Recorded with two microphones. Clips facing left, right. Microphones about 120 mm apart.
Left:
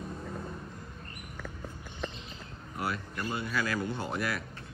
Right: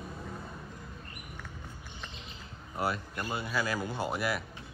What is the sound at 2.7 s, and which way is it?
A man's voice, 25° right (ahead or behind).